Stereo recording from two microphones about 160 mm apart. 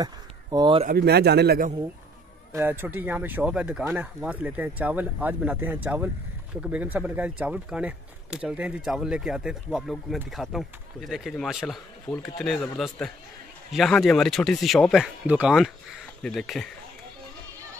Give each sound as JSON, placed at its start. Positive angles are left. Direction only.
{"t": 0.0, "sound": "a sound", "side_deg": -25}
{"t": 0.8, "sound": "a man's voice", "side_deg": -85}
{"t": 2.5, "sound": "speech", "side_deg": -15}